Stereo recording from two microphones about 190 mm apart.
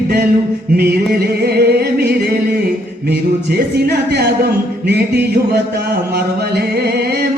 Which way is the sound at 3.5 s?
60° right (ahead or behind).